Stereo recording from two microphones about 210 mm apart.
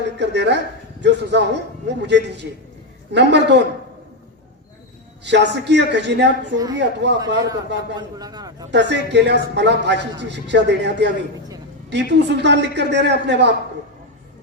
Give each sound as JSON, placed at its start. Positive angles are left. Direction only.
{"t": 0.0, "sound": "a woman's voice", "side_deg": -55}
{"t": 5.2, "sound": "a man's voice", "side_deg": -55}
{"t": 7.9, "sound": "a man's voice", "side_deg": -20}
{"t": 8.7, "sound": "a man's voice", "side_deg": -55}